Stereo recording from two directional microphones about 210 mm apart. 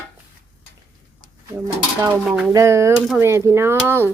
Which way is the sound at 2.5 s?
15° right (ahead or behind).